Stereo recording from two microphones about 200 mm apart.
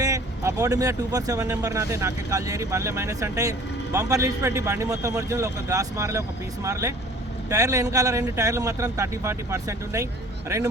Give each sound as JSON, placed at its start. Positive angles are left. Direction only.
{"t": 0.0, "sound": "speech", "side_deg": -15}